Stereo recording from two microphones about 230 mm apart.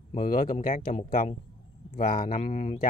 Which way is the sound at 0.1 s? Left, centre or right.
Left.